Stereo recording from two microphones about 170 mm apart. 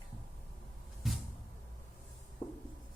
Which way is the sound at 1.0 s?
Centre (ahead or behind).